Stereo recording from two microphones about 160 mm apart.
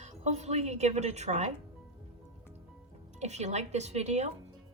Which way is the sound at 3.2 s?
45° right (ahead or behind).